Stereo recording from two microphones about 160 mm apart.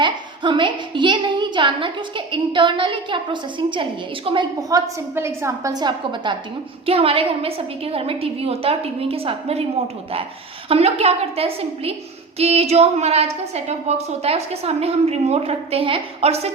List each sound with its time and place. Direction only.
0.0 s a woman's voice: 30° right (ahead or behind)
4.7 s a woman's voice: 15° right (ahead or behind); by 9.6 s 40° right (ahead or behind)
10.7 s a woman's voice: 40° right (ahead or behind)